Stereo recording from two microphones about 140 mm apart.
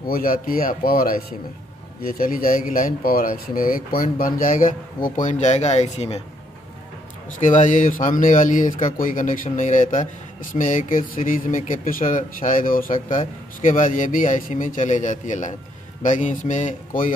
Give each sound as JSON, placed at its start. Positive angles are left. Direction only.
{"t": 0.0, "sound": "speech", "side_deg": 90}
{"t": 7.3, "sound": "speech", "side_deg": 60}